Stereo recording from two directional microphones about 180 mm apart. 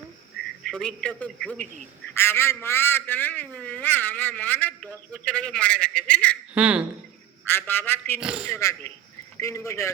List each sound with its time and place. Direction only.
0.6 s a man's voice: 5° left (ahead or behind)
6.5 s speech: 5° right (ahead or behind)
7.4 s a man's voice: 10° left (ahead or behind)
8.2 s a man's voice: 5° right (ahead or behind)
8.4 s a man's voice: 15° left (ahead or behind)